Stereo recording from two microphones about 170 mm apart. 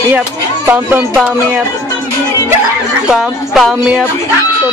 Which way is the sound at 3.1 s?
Centre (ahead or behind).